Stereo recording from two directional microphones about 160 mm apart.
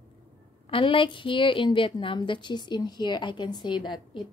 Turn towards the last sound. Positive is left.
turn(degrees=30)  # may be behind; listen again after turning